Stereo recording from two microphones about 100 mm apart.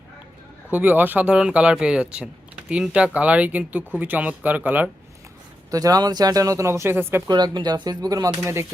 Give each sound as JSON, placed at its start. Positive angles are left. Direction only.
{"t": 0.7, "sound": "speech", "side_deg": -15}
{"t": 5.7, "sound": "speech", "side_deg": -35}
{"t": 7.3, "sound": "speech", "side_deg": -45}